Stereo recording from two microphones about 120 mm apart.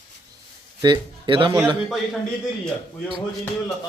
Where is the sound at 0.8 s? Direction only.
40° right (ahead or behind).